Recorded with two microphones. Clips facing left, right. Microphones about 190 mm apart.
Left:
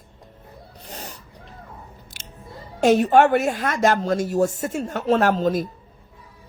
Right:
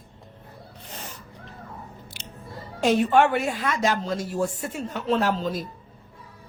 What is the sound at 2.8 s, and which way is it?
A woman's voice, 45° left (ahead or behind).